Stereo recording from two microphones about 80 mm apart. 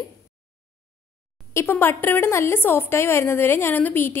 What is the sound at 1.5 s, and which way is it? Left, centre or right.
A woman's voice, left.